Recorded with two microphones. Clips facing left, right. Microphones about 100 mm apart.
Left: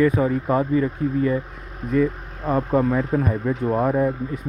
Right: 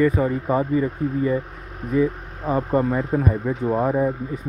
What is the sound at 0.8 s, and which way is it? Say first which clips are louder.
Speech: left 1 dB; 15° right (ahead or behind).